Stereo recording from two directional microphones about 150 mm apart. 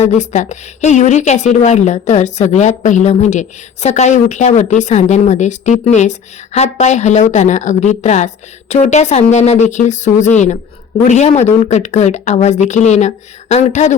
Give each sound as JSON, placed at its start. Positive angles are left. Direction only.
{"t": 0.0, "sound": "a woman's voice", "side_deg": 50}